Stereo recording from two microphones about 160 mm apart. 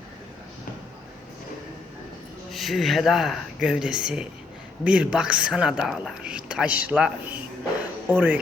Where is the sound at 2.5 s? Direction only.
Centre (ahead or behind).